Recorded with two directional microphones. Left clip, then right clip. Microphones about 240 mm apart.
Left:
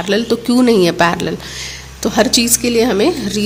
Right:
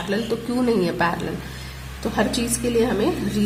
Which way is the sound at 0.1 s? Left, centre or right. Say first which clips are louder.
Left 10 dB; left.